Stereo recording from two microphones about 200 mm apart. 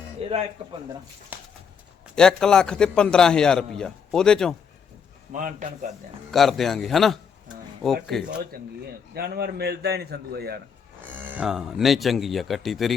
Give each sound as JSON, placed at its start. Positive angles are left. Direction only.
{"t": 0.2, "sound": "a man's voice", "side_deg": -30}
{"t": 1.3, "sound": "horse", "side_deg": -10}
{"t": 2.1, "sound": "a man's voice", "side_deg": 5}
{"t": 5.3, "sound": "a man's voice", "side_deg": -40}
{"t": 6.3, "sound": "a man's voice", "side_deg": 0}
{"t": 8.5, "sound": "a man's voice", "side_deg": -50}
{"t": 11.2, "sound": "a man's voice", "side_deg": -5}